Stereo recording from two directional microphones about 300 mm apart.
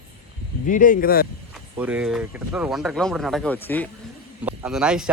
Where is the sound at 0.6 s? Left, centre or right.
Left.